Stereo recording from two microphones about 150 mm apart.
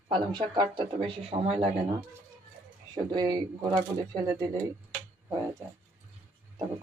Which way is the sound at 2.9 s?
30° right (ahead or behind).